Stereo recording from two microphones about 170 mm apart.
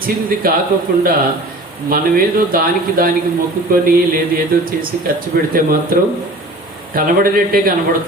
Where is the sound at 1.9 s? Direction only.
55° right (ahead or behind).